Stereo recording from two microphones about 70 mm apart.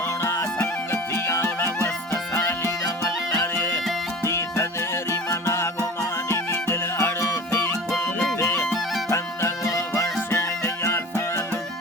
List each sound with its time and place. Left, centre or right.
0.2 s music: left
2.8 s music: left
3.4 s music: left
5.3 s music: left